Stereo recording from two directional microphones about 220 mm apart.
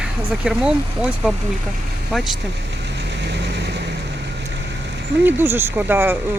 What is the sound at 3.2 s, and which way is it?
Vehicle, 50° right (ahead or behind).